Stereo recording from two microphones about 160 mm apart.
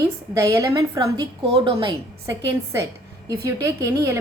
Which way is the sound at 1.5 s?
30° right (ahead or behind).